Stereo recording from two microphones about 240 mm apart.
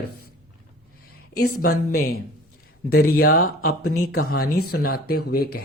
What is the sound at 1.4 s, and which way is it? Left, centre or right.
Speech, left.